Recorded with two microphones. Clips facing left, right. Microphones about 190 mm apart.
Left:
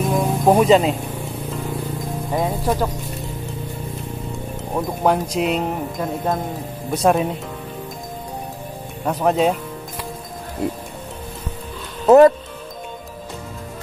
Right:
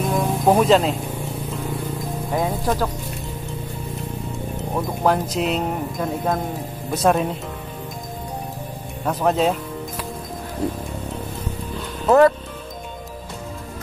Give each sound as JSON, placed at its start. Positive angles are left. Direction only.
{"t": 0.1, "sound": "music", "side_deg": 5}
{"t": 2.3, "sound": "speech", "side_deg": 5}
{"t": 4.7, "sound": "speech", "side_deg": 0}
{"t": 9.0, "sound": "speech", "side_deg": 0}
{"t": 12.1, "sound": "speech", "side_deg": 20}